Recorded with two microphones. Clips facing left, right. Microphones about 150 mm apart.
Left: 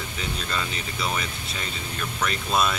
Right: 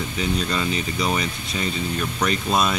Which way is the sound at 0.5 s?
5° right (ahead or behind).